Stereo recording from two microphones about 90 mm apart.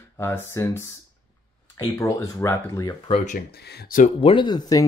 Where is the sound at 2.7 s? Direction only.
40° left (ahead or behind).